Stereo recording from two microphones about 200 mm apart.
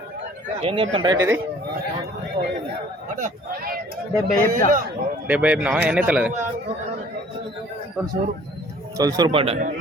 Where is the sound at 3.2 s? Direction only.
50° right (ahead or behind).